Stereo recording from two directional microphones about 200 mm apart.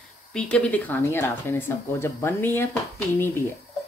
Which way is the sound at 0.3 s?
5° left (ahead or behind).